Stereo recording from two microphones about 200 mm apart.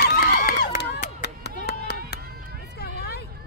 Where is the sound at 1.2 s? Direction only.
60° left (ahead or behind).